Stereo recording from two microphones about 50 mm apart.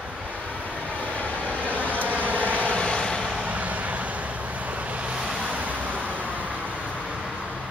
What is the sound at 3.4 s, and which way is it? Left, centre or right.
Vehicle, right.